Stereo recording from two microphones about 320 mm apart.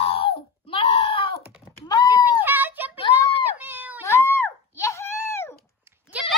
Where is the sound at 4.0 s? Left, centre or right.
Centre.